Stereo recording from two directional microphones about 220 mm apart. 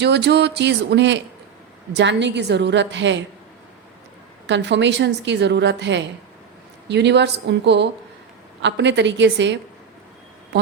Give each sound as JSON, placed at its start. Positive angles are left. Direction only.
{"t": 0.0, "sound": "a woman's voice", "side_deg": -50}
{"t": 4.4, "sound": "a woman's voice", "side_deg": -55}